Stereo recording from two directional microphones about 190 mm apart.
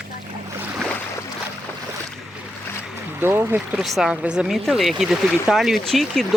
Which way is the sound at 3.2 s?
10° right (ahead or behind).